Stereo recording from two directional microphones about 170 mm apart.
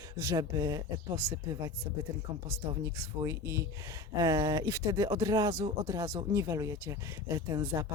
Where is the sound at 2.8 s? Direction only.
15° right (ahead or behind).